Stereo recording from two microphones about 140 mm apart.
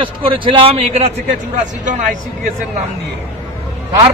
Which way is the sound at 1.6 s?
65° right (ahead or behind).